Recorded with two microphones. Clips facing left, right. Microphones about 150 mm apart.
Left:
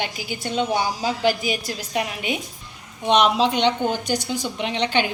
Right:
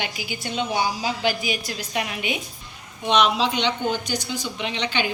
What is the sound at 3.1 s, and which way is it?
A woman's voice, 50° left (ahead or behind).